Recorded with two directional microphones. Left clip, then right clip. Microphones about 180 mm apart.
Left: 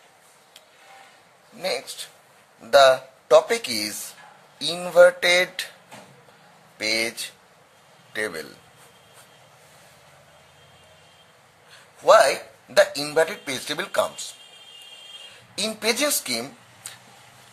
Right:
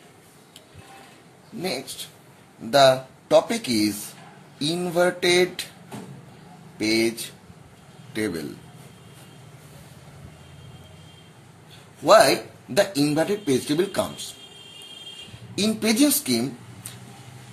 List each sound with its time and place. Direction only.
1.6 s speech: 45° left (ahead or behind)
6.8 s a man's voice: 45° left (ahead or behind)
12.1 s speech: 40° left (ahead or behind)
15.5 s speech: 40° left (ahead or behind)